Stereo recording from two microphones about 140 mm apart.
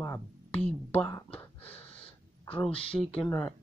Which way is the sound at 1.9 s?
40° left (ahead or behind).